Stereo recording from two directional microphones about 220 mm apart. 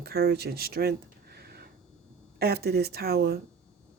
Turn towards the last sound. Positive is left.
turn(degrees=-45)  # may be behind; listen again after turning